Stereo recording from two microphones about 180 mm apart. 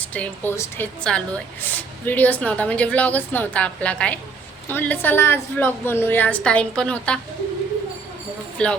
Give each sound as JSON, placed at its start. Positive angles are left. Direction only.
{"t": 0.0, "sound": "a woman's voice", "side_deg": 10}